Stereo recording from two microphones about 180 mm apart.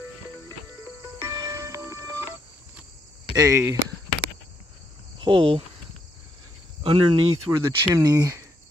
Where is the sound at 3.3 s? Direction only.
20° right (ahead or behind).